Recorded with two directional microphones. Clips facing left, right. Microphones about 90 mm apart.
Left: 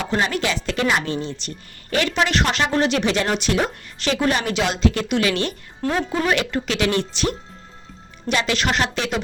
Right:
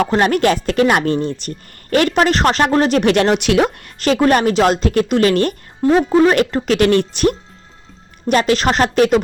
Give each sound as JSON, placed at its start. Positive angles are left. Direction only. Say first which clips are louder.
{"t": 0.0, "sound": "speech", "louder": "right 8 dB", "side_deg": -50}
{"t": 3.0, "sound": "speech", "louder": "right 7 dB", "side_deg": -60}
{"t": 3.9, "sound": "speech", "louder": "right 7 dB", "side_deg": -45}
{"t": 5.8, "sound": "speech", "louder": "right 9 dB", "side_deg": -15}
{"t": 6.1, "sound": "speech", "louder": "right 9 dB", "side_deg": -45}